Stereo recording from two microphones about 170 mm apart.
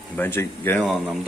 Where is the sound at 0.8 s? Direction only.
Centre (ahead or behind).